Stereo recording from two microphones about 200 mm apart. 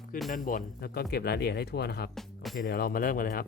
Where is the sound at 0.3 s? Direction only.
40° left (ahead or behind).